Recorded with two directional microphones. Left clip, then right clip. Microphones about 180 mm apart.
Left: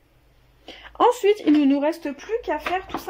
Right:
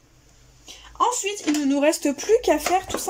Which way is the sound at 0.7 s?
35° left (ahead or behind).